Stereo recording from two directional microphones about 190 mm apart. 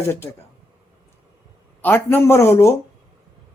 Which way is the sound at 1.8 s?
10° left (ahead or behind).